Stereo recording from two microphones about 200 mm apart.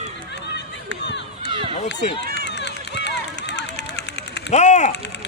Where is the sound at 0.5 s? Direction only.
60° left (ahead or behind).